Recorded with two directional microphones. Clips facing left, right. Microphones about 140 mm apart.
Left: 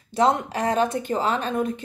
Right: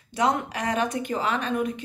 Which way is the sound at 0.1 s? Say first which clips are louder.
Left 4 dB; 30° left (ahead or behind).